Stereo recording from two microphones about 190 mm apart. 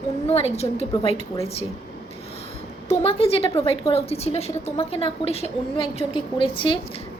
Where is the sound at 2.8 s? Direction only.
30° left (ahead or behind).